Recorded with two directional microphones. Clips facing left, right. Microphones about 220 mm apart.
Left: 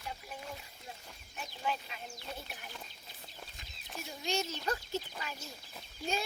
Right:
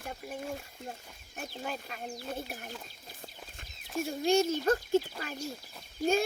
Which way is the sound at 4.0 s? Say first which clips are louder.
Right 10 dB; 50° right (ahead or behind).